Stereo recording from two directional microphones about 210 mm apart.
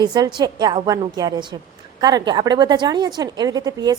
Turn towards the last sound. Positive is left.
turn(degrees=-20)  # may be behind; listen again after turning